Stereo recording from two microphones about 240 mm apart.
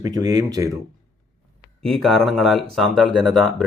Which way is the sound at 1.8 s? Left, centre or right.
Centre.